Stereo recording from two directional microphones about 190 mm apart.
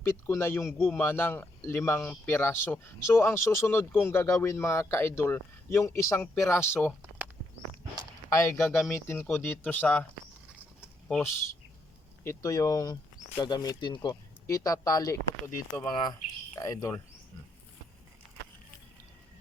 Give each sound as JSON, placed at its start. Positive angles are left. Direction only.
{"t": 0.0, "sound": "speech", "side_deg": 15}
{"t": 8.3, "sound": "speech", "side_deg": 15}
{"t": 10.8, "sound": "a sound", "side_deg": 0}
{"t": 12.2, "sound": "speech", "side_deg": 15}